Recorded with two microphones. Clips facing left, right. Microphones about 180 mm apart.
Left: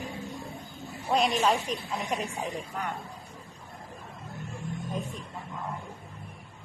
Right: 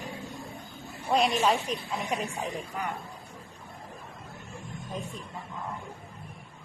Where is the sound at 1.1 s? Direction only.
Centre (ahead or behind).